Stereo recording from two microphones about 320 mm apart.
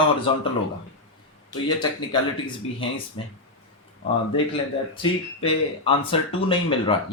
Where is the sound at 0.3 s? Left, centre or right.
Centre.